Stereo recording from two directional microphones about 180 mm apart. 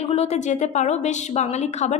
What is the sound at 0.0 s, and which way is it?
A woman's voice, 35° left (ahead or behind).